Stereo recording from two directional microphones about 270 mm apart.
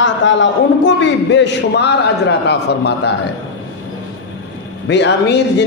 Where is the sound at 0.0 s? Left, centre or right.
Left.